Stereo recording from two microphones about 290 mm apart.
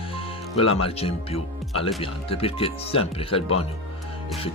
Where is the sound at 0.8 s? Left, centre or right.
Centre.